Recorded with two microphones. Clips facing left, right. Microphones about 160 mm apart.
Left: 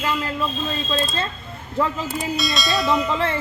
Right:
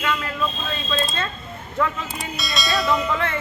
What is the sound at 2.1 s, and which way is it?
Bell, centre (ahead or behind).